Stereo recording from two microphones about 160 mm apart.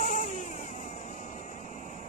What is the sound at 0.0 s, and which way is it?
Vehicle, 45° left (ahead or behind).